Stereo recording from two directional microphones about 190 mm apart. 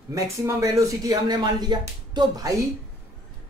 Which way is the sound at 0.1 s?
15° right (ahead or behind).